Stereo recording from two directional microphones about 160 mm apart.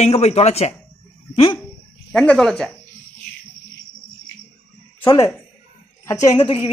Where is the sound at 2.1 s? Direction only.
5° left (ahead or behind).